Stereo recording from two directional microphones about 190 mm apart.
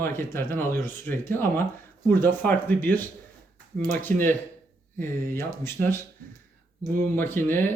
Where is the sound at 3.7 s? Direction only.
50° right (ahead or behind).